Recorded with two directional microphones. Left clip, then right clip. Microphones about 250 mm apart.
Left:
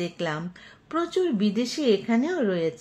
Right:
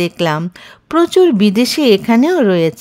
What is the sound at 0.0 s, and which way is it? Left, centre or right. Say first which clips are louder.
A woman's voice: right 13 dB; right.